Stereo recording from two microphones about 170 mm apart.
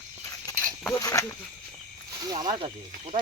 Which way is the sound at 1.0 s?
20° left (ahead or behind).